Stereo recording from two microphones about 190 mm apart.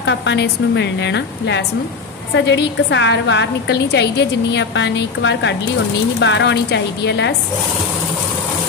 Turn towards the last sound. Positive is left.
turn(degrees=65)  # may be behind; listen again after turning